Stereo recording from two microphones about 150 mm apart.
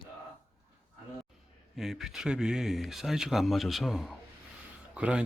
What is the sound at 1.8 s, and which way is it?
Speech, centre (ahead or behind).